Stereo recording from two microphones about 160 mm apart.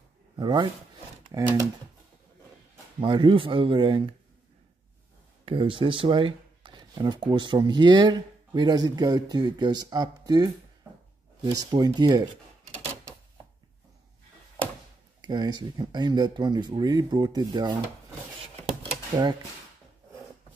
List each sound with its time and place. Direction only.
0.4 s speech: 25° right (ahead or behind)
3.0 s speech: 30° right (ahead or behind)
5.4 s speech: 35° right (ahead or behind)
11.5 s speech: 25° right (ahead or behind)
15.2 s speech: 25° right (ahead or behind)